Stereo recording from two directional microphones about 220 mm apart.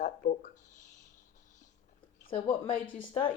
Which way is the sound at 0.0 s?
35° left (ahead or behind).